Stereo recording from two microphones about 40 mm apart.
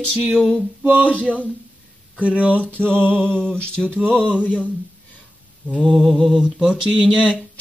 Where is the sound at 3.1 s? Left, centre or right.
Left.